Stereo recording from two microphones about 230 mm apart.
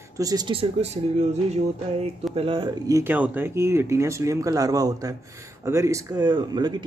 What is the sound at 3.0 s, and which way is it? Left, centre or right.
Speech, centre.